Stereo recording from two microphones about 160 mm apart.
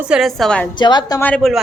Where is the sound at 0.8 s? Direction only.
25° left (ahead or behind).